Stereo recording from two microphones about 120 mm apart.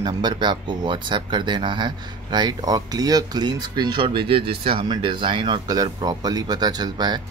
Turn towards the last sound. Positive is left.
turn(degrees=-35)  # may be behind; listen again after turning